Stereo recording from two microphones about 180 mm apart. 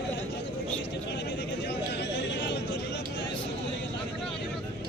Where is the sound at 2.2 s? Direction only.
75° left (ahead or behind).